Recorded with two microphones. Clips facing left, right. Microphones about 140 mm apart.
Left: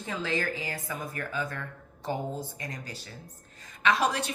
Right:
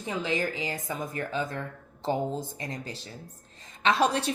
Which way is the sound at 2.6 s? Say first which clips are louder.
Right 3 dB; 25° right (ahead or behind).